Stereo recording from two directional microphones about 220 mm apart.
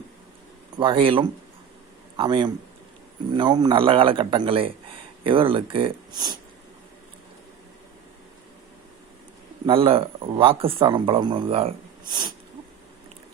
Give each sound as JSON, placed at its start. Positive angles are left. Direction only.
{"t": 0.8, "sound": "speech", "side_deg": -25}
{"t": 9.6, "sound": "speech", "side_deg": -25}